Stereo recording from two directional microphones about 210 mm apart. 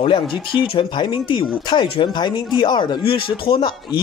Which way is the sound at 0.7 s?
25° left (ahead or behind).